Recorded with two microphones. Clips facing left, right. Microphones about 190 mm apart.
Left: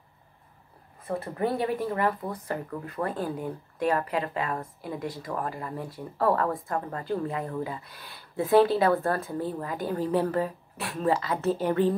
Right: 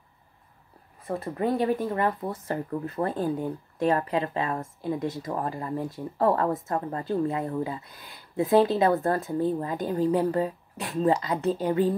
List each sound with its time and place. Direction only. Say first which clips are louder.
1.0 s speech: right 1 dB; 20° right (ahead or behind)